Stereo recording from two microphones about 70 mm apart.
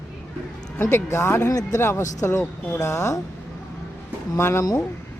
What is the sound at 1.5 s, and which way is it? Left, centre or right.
Speech, left.